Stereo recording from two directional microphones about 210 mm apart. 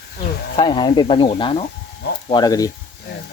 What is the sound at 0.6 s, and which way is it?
Speech, 20° left (ahead or behind).